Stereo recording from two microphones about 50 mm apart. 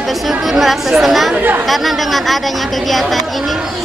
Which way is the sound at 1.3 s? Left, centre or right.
Right.